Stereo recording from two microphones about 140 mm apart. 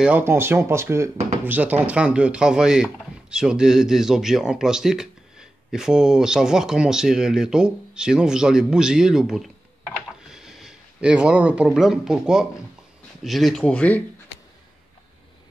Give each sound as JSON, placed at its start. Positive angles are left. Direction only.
{"t": 0.0, "sound": "speech", "side_deg": -15}